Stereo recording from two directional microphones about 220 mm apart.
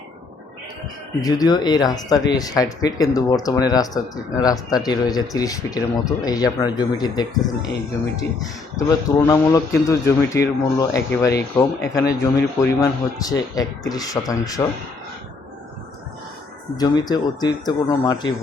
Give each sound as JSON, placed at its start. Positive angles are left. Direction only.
{"t": 1.2, "sound": "speech", "side_deg": 20}
{"t": 8.9, "sound": "speech", "side_deg": 15}
{"t": 16.7, "sound": "speech", "side_deg": 20}